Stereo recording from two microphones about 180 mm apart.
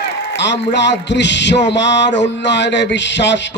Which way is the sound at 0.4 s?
75° left (ahead or behind).